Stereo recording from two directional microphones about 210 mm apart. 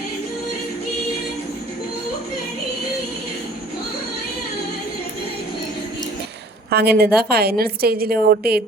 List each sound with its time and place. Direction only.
6.7 s a woman's voice: 50° right (ahead or behind)